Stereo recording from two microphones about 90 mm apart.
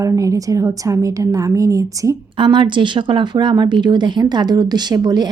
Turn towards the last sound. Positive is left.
turn(degrees=-50)  # may be behind; listen again after turning